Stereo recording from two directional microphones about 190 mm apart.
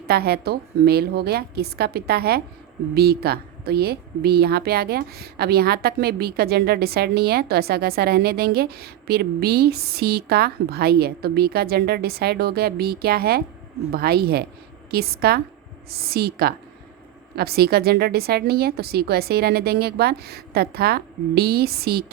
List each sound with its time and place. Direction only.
0.1 s a woman's voice: 55° right (ahead or behind)